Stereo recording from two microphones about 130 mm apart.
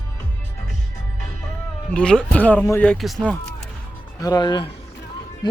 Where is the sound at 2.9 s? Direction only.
Centre (ahead or behind).